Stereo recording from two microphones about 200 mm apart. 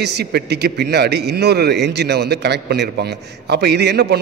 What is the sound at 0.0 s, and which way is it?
Speech, 55° right (ahead or behind).